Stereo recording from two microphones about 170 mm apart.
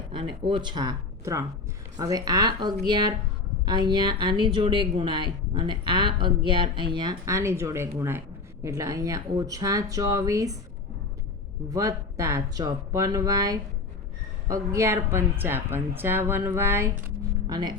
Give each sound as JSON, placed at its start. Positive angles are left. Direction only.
{"t": 0.1, "sound": "speech", "side_deg": -30}
{"t": 11.7, "sound": "speech", "side_deg": -20}